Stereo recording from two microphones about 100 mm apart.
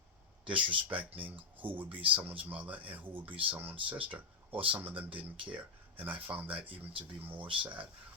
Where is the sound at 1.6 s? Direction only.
15° right (ahead or behind).